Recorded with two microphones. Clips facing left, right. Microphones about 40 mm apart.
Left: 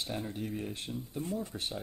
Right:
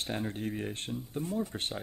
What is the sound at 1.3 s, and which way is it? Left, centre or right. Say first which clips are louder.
Speech: right 3 dB; right.